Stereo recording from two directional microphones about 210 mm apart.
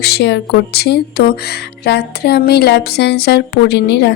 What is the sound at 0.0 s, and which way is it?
Speech, 50° left (ahead or behind).